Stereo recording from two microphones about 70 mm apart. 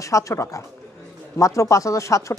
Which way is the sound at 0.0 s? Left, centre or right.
Left.